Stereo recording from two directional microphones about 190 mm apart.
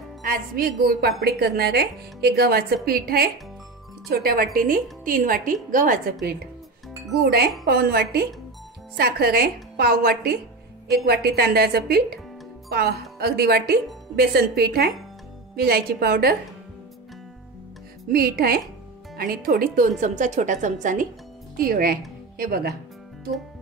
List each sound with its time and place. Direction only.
0.2 s a woman's voice: 50° right (ahead or behind)
7.2 s a woman's voice: 60° right (ahead or behind)
18.1 s a woman's voice: 55° right (ahead or behind)